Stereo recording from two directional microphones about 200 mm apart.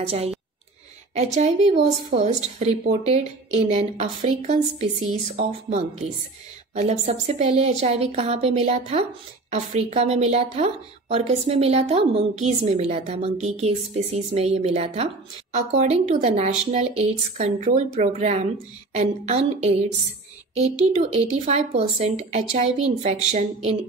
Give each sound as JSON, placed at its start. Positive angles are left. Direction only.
{"t": 0.0, "sound": "a woman's voice", "side_deg": -30}
{"t": 21.5, "sound": "a woman's voice", "side_deg": -35}